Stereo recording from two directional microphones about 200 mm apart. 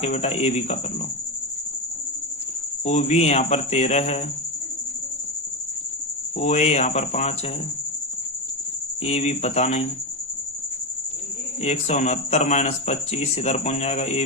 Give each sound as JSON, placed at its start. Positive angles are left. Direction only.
{"t": 0.0, "sound": "speech", "side_deg": 35}
{"t": 2.8, "sound": "speech", "side_deg": 35}
{"t": 6.3, "sound": "speech", "side_deg": 35}
{"t": 9.0, "sound": "speech", "side_deg": 35}
{"t": 11.6, "sound": "speech", "side_deg": 35}